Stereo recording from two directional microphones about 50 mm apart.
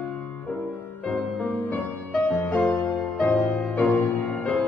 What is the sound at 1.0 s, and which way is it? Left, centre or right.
Music, left.